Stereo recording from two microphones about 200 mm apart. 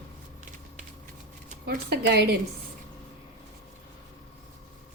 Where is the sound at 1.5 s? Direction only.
50° right (ahead or behind).